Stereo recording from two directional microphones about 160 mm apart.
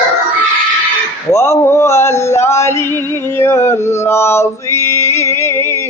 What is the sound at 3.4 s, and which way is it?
Male singing, 15° left (ahead or behind).